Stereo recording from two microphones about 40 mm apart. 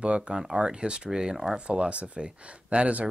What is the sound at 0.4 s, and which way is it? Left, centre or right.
Speech, centre.